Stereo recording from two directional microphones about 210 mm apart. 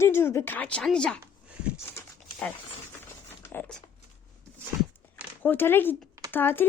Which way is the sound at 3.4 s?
5° left (ahead or behind).